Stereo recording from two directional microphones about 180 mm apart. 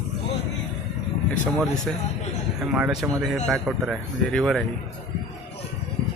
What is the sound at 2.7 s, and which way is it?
Speech, 5° right (ahead or behind).